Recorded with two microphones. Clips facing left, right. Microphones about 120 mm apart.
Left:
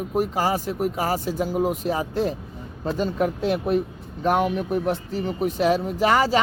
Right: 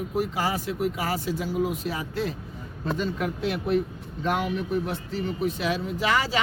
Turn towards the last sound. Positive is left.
turn(degrees=45)  # may be behind; listen again after turning